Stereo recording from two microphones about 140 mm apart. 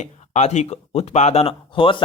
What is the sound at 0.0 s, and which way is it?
Speech, 50° left (ahead or behind).